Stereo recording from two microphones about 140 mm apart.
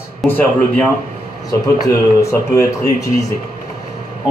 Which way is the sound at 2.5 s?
25° left (ahead or behind).